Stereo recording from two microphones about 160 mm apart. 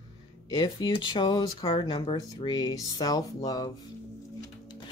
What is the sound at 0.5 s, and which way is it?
Speech, 25° left (ahead or behind).